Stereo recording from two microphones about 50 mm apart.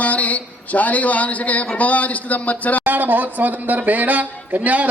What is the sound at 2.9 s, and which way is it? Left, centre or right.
Speech, right.